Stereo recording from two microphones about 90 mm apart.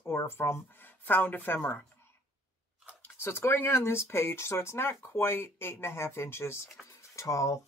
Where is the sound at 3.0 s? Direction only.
25° left (ahead or behind).